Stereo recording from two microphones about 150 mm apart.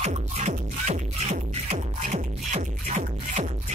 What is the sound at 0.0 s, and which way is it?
Music, 45° right (ahead or behind).